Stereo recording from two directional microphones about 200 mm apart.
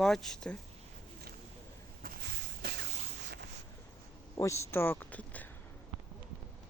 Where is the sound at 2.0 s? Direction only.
50° right (ahead or behind).